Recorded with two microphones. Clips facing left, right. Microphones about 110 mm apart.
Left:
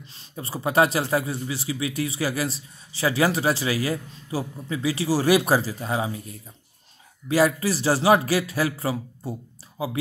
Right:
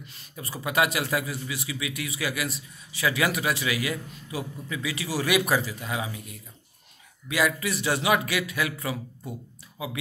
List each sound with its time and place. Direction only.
0.0 s speech: 30° left (ahead or behind)